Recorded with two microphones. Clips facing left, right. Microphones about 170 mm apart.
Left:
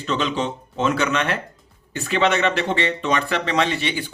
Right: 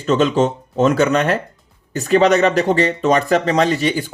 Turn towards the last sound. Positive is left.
turn(degrees=-40)  # may be behind; listen again after turning